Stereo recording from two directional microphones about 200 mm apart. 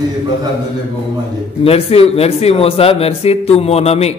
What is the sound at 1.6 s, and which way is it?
Speech, 30° left (ahead or behind).